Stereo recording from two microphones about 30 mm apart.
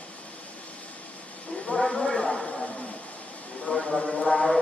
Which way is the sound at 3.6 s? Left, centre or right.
Left.